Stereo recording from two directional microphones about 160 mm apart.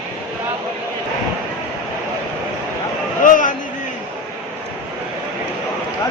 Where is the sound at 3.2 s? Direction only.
55° left (ahead or behind).